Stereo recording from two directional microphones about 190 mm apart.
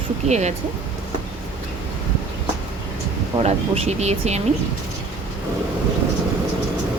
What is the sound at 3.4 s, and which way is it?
Speech, 35° right (ahead or behind).